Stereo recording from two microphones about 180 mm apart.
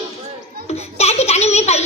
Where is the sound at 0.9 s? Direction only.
35° left (ahead or behind).